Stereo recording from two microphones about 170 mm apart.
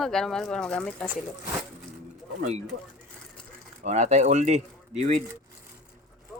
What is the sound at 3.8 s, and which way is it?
Speech, 45° right (ahead or behind).